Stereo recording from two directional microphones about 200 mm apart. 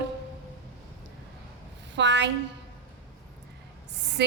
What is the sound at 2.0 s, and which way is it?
Speech, 60° right (ahead or behind).